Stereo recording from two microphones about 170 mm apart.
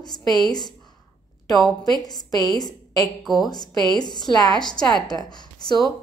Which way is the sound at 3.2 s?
Centre (ahead or behind).